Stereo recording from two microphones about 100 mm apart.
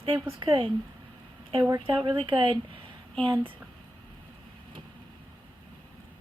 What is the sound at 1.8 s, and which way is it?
Speech, 55° right (ahead or behind).